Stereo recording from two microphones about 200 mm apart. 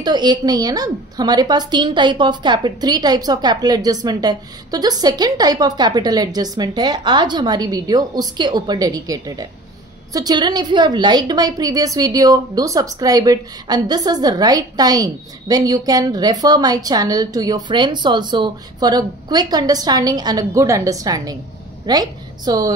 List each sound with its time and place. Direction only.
0.0 s a woman's voice: 20° right (ahead or behind)